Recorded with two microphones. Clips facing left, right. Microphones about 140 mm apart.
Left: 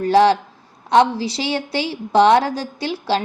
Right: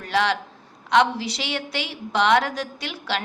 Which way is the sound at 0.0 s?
35° left (ahead or behind).